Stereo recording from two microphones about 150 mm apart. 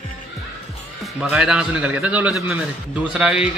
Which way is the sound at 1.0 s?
5° right (ahead or behind).